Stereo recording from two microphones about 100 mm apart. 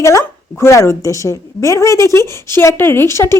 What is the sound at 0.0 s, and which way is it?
A woman's voice, 30° left (ahead or behind).